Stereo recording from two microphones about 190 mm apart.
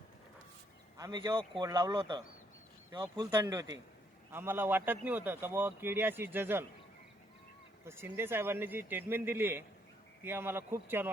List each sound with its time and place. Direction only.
0.9 s a man's voice: 20° right (ahead or behind)
7.9 s speech: 10° right (ahead or behind)